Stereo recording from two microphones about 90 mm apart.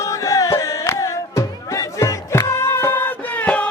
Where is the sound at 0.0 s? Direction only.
35° left (ahead or behind).